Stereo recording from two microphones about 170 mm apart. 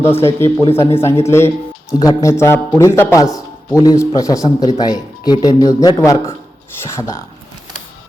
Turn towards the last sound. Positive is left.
turn(degrees=20)  # may be behind; listen again after turning